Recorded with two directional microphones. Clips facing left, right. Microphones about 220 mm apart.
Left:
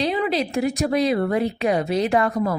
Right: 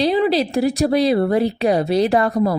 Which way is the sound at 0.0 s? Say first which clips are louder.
Right 5 dB; 35° right (ahead or behind).